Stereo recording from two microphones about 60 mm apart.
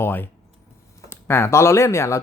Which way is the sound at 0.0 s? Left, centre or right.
Left.